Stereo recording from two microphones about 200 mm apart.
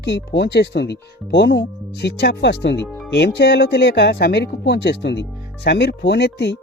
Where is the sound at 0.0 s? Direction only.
60° left (ahead or behind).